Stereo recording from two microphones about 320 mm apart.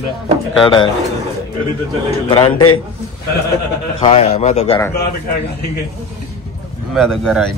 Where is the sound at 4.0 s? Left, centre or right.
Centre.